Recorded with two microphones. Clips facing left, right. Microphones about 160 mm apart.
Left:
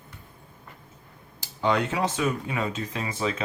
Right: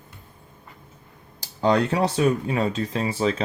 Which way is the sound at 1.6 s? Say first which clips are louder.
Right 4 dB; 35° right (ahead or behind).